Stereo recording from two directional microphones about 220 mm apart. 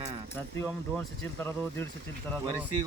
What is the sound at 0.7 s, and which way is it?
Speech, 5° left (ahead or behind).